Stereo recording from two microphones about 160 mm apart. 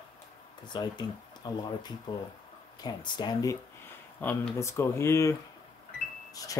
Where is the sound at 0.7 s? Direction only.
25° left (ahead or behind).